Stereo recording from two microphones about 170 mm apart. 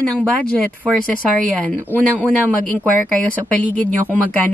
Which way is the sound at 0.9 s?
5° left (ahead or behind).